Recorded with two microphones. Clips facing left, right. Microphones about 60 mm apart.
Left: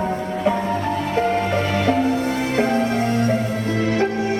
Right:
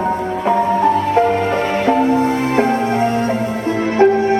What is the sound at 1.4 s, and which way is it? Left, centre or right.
Music, right.